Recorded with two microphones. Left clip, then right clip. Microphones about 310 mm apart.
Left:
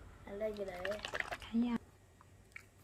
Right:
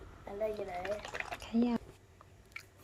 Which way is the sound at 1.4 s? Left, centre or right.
Centre.